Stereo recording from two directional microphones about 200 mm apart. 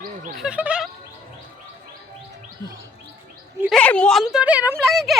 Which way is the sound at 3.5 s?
Centre (ahead or behind).